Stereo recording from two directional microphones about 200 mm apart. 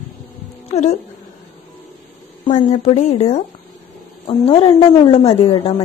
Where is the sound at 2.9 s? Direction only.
35° left (ahead or behind).